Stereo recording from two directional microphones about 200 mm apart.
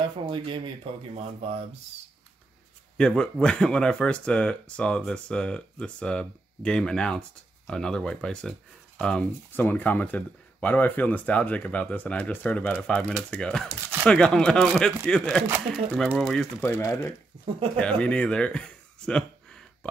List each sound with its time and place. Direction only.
0.0 s speech: 25° right (ahead or behind)
3.0 s speech: 5° left (ahead or behind)
15.4 s speech: 10° right (ahead or behind)
16.2 s speech: 5° left (ahead or behind)